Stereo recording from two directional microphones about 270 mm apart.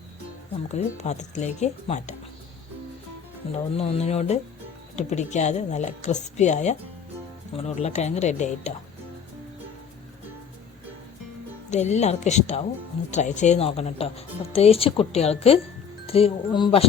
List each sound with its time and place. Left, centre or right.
0.7 s speech: left
3.4 s speech: left
11.7 s speech: left